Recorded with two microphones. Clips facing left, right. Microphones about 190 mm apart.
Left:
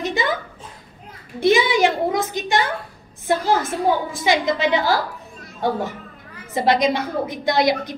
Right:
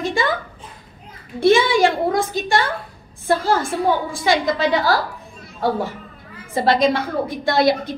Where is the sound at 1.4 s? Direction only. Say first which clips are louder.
Right 2 dB; 20° left (ahead or behind).